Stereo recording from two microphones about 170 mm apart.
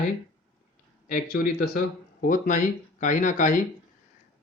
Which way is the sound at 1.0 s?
55° left (ahead or behind).